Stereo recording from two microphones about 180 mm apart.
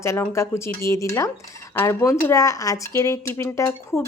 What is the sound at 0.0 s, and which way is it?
A woman's voice, 15° left (ahead or behind).